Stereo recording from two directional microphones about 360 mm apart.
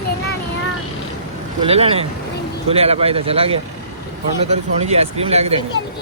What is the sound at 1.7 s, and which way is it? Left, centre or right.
Speech, centre.